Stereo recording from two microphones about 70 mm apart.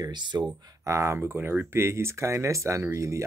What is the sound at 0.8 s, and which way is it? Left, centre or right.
Speech, right.